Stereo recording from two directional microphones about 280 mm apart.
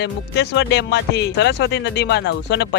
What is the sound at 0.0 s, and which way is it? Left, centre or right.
Speech, left.